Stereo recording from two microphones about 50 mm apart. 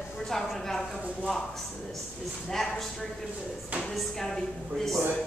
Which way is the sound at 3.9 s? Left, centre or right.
Centre.